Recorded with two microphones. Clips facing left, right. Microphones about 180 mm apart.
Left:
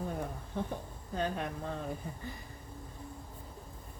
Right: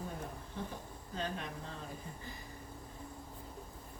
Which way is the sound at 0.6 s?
60° left (ahead or behind).